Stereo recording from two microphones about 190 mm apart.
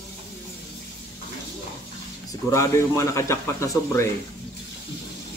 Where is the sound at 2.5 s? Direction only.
15° left (ahead or behind).